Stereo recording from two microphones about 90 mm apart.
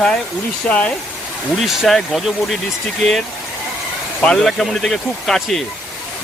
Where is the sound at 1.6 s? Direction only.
Centre (ahead or behind).